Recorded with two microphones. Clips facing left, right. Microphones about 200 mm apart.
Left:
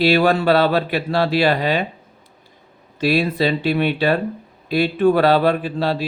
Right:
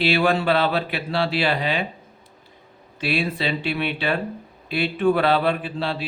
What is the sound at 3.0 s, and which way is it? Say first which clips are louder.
Speech: left 6 dB; 40° left (ahead or behind).